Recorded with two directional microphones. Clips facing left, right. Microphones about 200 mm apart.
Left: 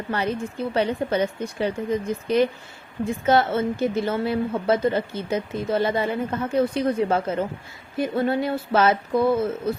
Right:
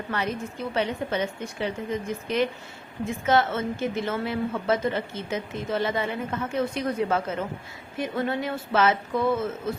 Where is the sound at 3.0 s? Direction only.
35° left (ahead or behind).